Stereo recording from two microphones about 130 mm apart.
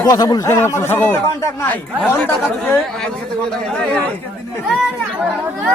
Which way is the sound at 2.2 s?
10° left (ahead or behind).